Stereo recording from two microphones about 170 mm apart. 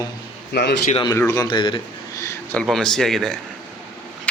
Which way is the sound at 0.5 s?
80° left.